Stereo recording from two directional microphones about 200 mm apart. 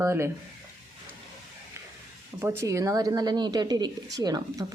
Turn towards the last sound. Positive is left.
turn(degrees=-20)  # may be behind; listen again after turning